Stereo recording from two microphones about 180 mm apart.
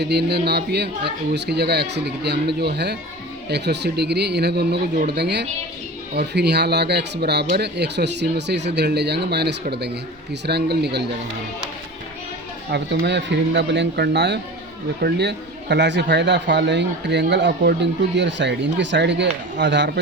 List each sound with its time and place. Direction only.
0.0 s speech: 70° right (ahead or behind)
12.7 s speech: 70° right (ahead or behind)